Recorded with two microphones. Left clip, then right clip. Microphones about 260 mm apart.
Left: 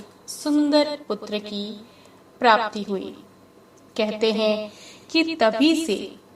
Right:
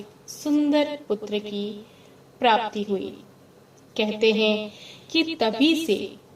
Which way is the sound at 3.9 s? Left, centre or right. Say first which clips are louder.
Right 1 dB; left.